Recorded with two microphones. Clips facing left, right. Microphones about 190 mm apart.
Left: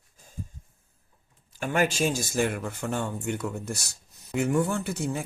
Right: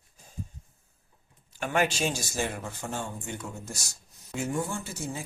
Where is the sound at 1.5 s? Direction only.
45° left (ahead or behind).